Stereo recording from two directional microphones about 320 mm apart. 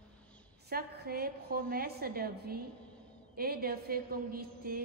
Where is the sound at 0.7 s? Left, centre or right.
Right.